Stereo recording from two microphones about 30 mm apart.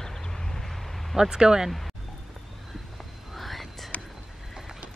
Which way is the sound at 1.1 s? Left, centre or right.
Right.